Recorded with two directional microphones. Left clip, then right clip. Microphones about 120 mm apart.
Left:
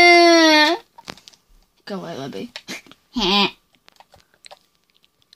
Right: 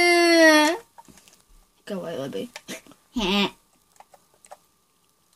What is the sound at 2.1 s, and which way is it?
Speech, 75° left (ahead or behind).